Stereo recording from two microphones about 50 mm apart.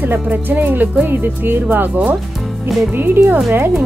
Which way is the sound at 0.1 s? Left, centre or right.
Right.